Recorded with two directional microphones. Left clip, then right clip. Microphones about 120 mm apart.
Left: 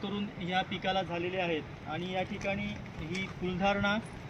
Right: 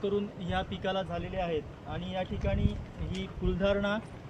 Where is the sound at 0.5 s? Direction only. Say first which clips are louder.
Left 1 dB; 40° right (ahead or behind).